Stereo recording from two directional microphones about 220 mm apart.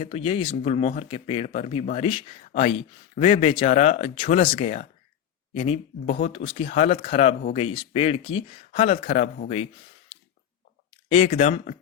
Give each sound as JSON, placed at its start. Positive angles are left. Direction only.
{"t": 0.0, "sound": "speech", "side_deg": 25}
{"t": 10.9, "sound": "a sound", "side_deg": 25}
{"t": 11.3, "sound": "speech", "side_deg": 30}